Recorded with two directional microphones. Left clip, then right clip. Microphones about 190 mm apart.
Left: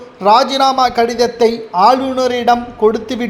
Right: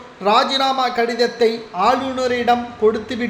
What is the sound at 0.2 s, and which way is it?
A man's voice, 30° left (ahead or behind).